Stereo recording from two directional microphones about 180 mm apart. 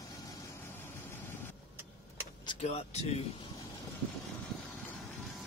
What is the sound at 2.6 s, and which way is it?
Speech, 35° left (ahead or behind).